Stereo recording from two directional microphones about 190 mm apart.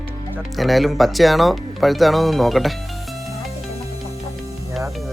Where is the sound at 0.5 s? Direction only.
Centre (ahead or behind).